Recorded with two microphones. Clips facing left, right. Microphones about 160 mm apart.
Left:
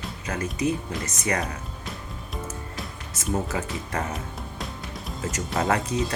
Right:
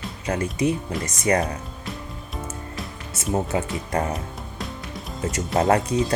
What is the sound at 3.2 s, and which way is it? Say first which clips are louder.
Speech: right 4 dB; 35° right (ahead or behind).